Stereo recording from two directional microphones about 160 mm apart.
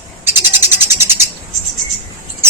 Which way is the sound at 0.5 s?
15° right (ahead or behind).